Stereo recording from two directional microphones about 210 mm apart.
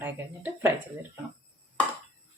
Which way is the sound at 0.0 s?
10° right (ahead or behind).